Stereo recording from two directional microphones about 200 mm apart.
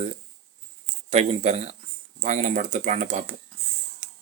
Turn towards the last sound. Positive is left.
turn(degrees=-35)  # may be behind; listen again after turning